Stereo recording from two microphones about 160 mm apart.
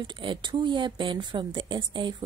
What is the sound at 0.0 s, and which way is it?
A woman's voice, 30° right (ahead or behind).